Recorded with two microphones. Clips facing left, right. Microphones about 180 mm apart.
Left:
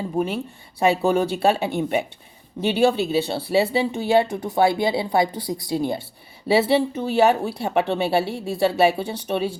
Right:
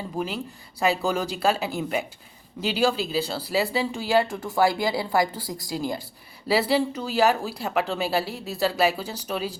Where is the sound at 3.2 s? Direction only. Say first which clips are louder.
Left 4 dB; 25° left (ahead or behind).